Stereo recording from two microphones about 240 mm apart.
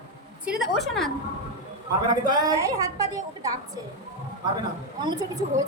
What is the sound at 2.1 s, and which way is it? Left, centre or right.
A woman's voice, centre.